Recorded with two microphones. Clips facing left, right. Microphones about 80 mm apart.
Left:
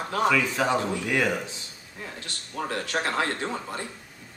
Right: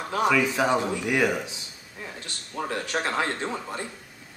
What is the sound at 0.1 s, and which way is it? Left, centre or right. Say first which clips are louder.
Speech: right 1 dB; centre.